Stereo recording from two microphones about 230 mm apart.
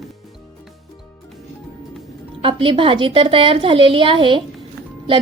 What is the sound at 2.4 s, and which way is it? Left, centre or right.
A woman's voice, right.